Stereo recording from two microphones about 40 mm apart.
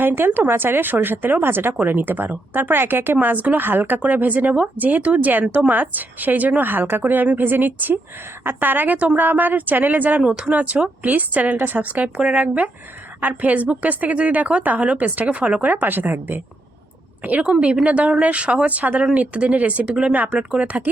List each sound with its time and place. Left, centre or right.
0.0 s a woman's voice: right
0.4 s speech: right
1.9 s speech: right
4.0 s a woman's voice: right
5.3 s a woman's voice: right
12.0 s speech: right
15.6 s a woman's voice: right
17.2 s speech: right
17.5 s a woman's voice: right